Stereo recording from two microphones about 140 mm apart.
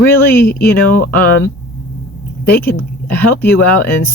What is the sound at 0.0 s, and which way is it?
Speech, 15° left (ahead or behind).